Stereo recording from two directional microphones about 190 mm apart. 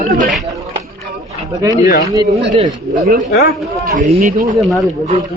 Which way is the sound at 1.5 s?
20° right (ahead or behind).